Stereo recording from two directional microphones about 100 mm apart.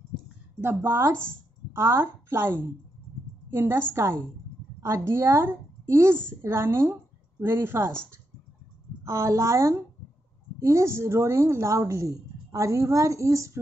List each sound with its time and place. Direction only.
0.6 s a woman's voice: 25° right (ahead or behind)
9.0 s a woman's voice: 30° right (ahead or behind)